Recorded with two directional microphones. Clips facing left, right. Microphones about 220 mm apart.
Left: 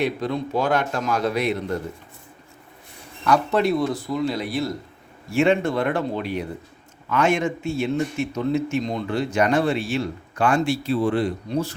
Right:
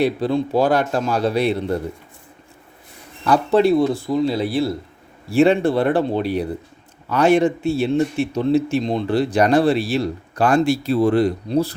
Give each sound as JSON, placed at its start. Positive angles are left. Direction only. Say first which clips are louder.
{"t": 0.0, "sound": "a man's voice", "louder": "right 5 dB", "side_deg": -30}
{"t": 3.2, "sound": "a man's voice", "louder": "right 5 dB", "side_deg": -30}